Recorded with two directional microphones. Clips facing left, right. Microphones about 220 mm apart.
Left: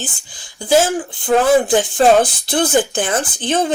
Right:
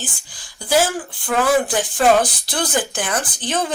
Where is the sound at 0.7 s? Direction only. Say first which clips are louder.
Left 4 dB; 20° left (ahead or behind).